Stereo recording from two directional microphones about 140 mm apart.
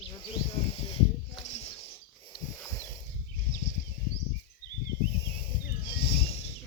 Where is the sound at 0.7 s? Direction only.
45° left (ahead or behind).